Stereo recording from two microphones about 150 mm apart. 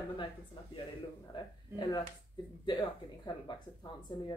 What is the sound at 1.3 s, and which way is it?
Speech, 30° left (ahead or behind).